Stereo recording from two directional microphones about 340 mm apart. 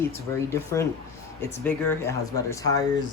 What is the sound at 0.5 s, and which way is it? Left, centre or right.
Speech, centre.